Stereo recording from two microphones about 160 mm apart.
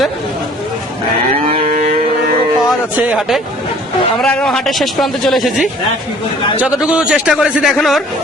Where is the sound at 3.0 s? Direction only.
Centre (ahead or behind).